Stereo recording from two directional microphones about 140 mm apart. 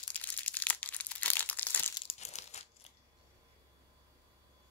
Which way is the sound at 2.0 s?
50° left (ahead or behind).